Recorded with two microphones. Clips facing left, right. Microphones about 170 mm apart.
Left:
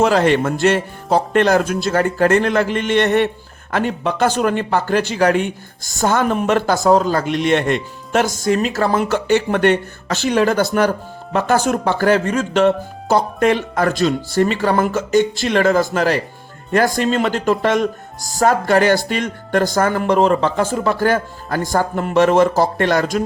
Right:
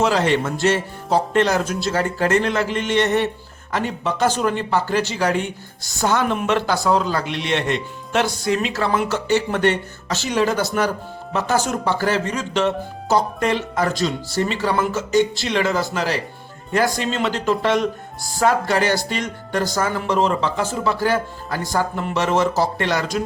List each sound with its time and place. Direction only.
0.0 s a man's voice: 55° left (ahead or behind)